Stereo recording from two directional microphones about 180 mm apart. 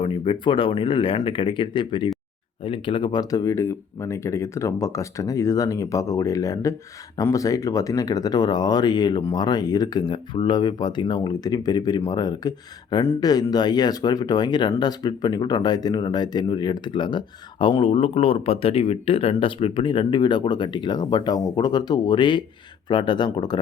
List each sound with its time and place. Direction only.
0.0 s speech: 30° left (ahead or behind)